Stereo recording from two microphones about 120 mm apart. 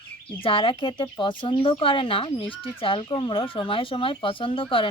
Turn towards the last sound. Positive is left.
turn(degrees=45)  # may be behind; listen again after turning